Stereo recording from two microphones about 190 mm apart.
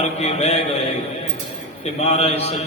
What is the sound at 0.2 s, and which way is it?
Speech, 35° left (ahead or behind).